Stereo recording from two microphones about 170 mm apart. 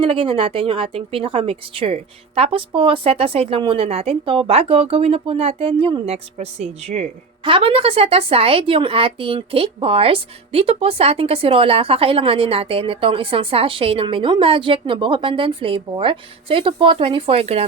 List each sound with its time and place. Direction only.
0.0 s speech: 30° right (ahead or behind)